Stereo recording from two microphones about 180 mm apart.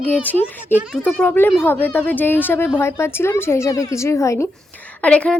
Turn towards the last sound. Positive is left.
turn(degrees=5)  # may be behind; listen again after turning